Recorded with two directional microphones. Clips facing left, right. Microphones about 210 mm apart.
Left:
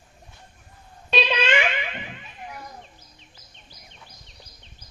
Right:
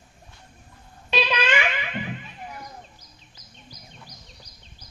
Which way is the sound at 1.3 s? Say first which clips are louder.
Left 2 dB; 25° left (ahead or behind).